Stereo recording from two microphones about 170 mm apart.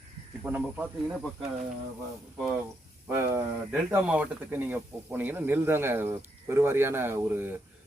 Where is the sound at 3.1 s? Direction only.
15° right (ahead or behind).